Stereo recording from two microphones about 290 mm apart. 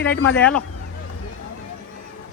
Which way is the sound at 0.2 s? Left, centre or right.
Left.